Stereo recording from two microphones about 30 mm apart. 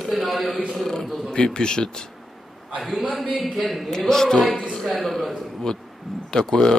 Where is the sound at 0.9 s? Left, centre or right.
Left.